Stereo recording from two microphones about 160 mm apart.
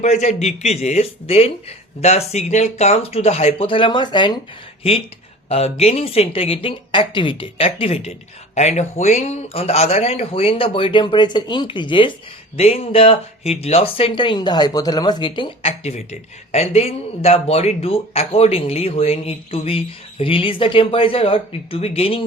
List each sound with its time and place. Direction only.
0.0 s speech: 45° left (ahead or behind)